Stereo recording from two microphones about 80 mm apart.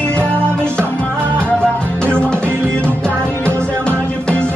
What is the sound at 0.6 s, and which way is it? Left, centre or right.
Music, centre.